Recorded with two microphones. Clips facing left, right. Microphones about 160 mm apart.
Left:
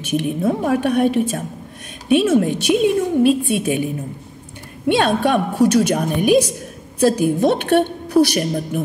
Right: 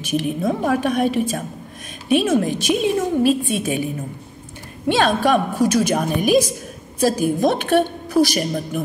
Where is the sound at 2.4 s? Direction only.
60° left (ahead or behind).